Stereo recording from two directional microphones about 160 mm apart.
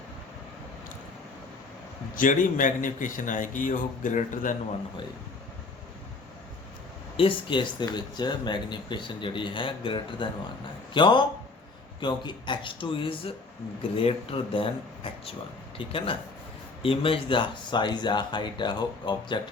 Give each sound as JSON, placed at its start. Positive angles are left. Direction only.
{"t": 2.1, "sound": "a man's voice", "side_deg": 55}
{"t": 7.2, "sound": "speech", "side_deg": 30}